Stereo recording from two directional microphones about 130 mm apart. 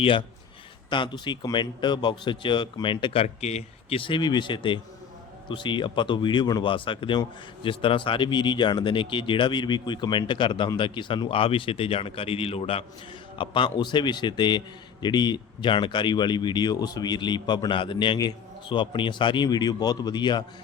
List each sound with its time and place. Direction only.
0.0 s speech: 40° left (ahead or behind)
3.2 s speech: 55° left (ahead or behind); by 20.4 s 35° left (ahead or behind)